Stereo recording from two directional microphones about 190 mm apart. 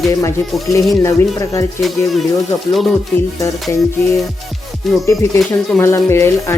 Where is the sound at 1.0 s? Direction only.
15° left (ahead or behind).